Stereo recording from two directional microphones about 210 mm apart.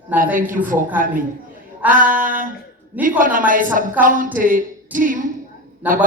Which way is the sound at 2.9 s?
10° right (ahead or behind).